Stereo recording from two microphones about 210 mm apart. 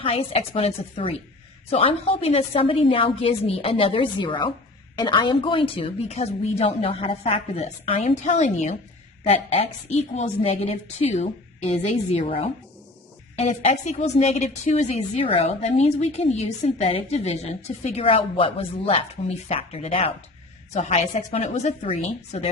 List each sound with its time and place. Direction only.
0.0 s a woman's voice: 30° left (ahead or behind)